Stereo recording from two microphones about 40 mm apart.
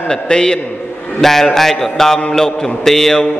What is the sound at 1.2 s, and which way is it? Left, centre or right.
Mantra, centre.